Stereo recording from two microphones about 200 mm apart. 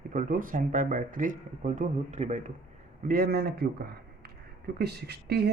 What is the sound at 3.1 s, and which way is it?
Speech, 50° right (ahead or behind).